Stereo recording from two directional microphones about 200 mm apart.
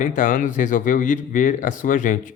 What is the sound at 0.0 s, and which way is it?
A man's voice, 40° left (ahead or behind).